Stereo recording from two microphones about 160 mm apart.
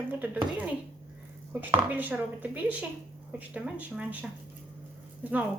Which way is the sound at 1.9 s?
10° right (ahead or behind).